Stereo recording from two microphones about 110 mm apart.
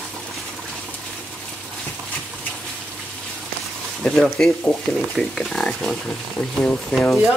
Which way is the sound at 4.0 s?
5° left (ahead or behind).